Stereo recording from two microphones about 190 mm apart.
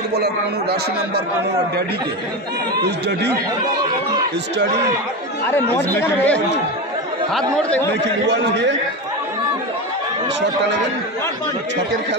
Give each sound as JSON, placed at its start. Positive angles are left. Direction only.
{"t": 0.1, "sound": "a man's voice", "side_deg": -60}
{"t": 5.5, "sound": "speech", "side_deg": 10}
{"t": 7.9, "sound": "a man's voice", "side_deg": -65}